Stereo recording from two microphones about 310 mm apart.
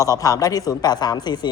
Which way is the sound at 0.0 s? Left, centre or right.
Centre.